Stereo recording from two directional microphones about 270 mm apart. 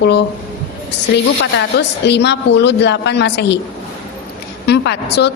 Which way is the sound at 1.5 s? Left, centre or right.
Left.